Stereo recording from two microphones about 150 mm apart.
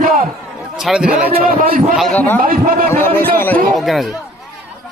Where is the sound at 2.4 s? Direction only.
70° right (ahead or behind).